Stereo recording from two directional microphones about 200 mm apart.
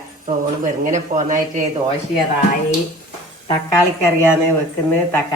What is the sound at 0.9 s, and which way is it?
Speech, 40° right (ahead or behind).